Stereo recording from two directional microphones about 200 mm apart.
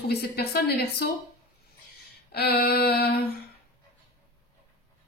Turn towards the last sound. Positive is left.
turn(degrees=50)  # may be behind; listen again after turning